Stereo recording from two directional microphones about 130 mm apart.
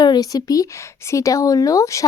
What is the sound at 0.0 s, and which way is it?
Speech, 30° left (ahead or behind).